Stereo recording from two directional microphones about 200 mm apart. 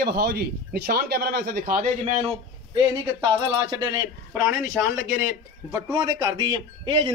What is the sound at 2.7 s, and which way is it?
Speech, 20° right (ahead or behind).